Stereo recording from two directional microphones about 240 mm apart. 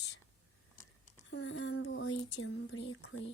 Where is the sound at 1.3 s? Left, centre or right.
Left.